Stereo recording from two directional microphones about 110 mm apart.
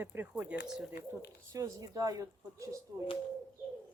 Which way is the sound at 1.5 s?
30° right (ahead or behind).